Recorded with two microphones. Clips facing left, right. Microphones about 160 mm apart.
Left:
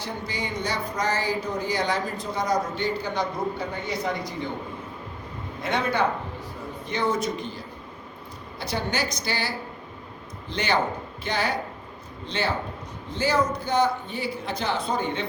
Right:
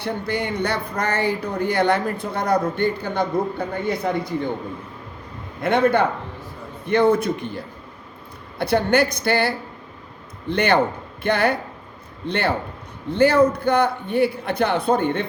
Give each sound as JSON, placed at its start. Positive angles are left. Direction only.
{"t": 0.0, "sound": "speech", "side_deg": -60}
{"t": 5.6, "sound": "speech", "side_deg": -55}